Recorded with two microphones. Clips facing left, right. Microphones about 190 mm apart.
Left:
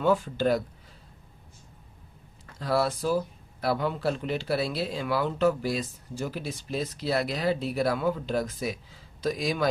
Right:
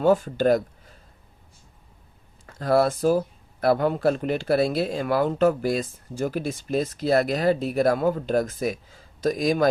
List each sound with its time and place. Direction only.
0.0 s speech: 45° right (ahead or behind)
2.6 s speech: 50° right (ahead or behind)